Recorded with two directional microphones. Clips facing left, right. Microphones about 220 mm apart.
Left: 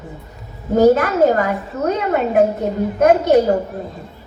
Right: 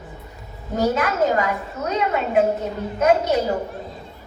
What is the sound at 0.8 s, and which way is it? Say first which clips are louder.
A child's voice: left 7 dB; 40° left (ahead or behind).